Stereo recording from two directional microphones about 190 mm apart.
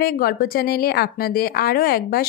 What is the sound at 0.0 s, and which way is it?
A woman's voice, 50° left (ahead or behind).